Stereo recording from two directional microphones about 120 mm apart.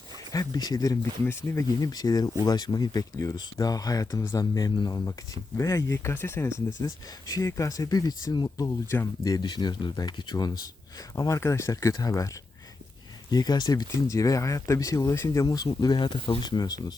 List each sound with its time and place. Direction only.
0.3 s speech: 35° left (ahead or behind)
1.2 s speech: 20° left (ahead or behind)
6.8 s speech: 30° left (ahead or behind)
13.3 s speech: 35° left (ahead or behind)
15.4 s speech: 35° left (ahead or behind)